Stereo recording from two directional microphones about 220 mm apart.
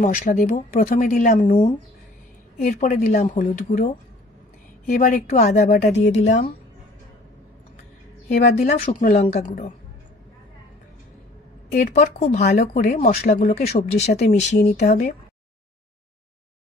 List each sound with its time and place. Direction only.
0.0 s speech: 40° left (ahead or behind)
2.7 s a woman's voice: 45° left (ahead or behind)
4.9 s speech: 40° left (ahead or behind)
8.7 s speech: 30° left (ahead or behind)
11.7 s speech: 35° left (ahead or behind)
14.9 s a woman's voice: 45° left (ahead or behind)